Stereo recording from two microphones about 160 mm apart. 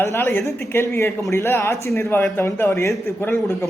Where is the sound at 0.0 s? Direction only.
15° left (ahead or behind).